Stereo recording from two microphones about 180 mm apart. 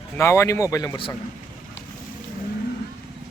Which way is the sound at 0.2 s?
15° left (ahead or behind).